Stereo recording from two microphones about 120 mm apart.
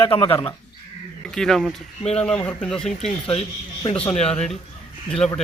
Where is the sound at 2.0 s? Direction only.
65° left (ahead or behind).